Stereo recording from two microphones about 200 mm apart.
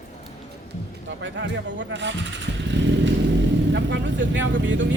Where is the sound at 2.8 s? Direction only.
65° right (ahead or behind).